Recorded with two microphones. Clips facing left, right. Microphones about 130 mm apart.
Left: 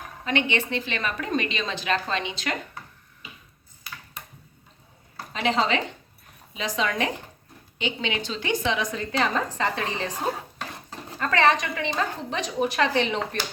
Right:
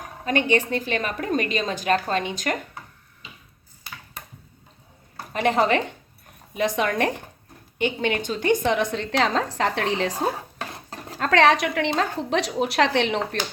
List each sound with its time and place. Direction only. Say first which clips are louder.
0.3 s a woman's voice: right 4 dB; 45° right (ahead or behind)
5.1 s a woman's voice: right 3 dB; 50° right (ahead or behind); by 13.1 s 90° right